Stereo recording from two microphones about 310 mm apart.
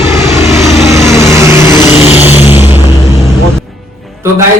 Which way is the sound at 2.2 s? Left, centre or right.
Centre.